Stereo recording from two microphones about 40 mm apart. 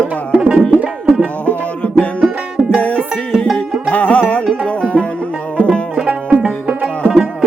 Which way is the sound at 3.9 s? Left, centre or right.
Left.